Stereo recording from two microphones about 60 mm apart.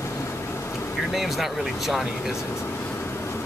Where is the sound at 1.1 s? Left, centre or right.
Centre.